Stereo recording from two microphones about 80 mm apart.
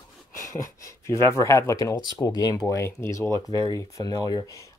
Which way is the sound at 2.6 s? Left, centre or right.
Left.